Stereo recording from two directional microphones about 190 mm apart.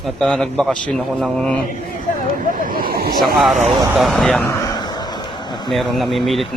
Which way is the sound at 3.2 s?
Centre (ahead or behind).